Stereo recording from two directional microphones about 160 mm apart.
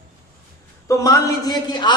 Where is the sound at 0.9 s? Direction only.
20° left (ahead or behind).